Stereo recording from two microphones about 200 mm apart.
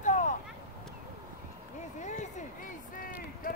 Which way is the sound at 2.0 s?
35° left (ahead or behind).